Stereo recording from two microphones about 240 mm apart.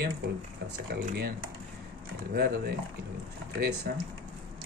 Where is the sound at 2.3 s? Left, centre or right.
Right.